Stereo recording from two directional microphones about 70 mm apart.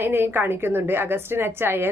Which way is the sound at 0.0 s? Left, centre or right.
Right.